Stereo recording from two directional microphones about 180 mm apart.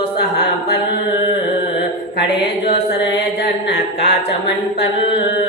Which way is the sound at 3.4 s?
75° left (ahead or behind).